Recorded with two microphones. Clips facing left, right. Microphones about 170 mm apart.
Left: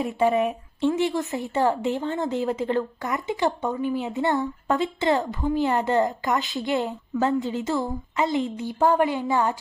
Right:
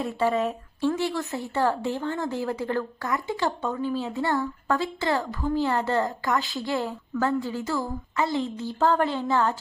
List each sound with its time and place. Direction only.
0.0 s a woman's voice: 20° left (ahead or behind)